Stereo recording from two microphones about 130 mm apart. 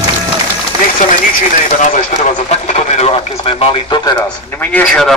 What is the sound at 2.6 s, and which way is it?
Speech, 65° left (ahead or behind).